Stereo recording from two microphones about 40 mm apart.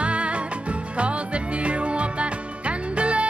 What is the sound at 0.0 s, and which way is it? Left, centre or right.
Music, right.